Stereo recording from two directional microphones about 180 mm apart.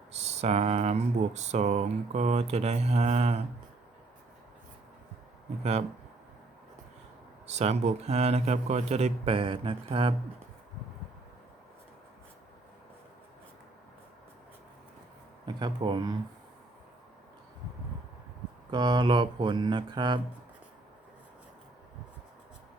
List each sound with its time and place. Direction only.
0.1 s speech: 35° right (ahead or behind)
7.4 s speech: 35° right (ahead or behind)
15.4 s speech: 25° right (ahead or behind)
18.7 s speech: 25° right (ahead or behind)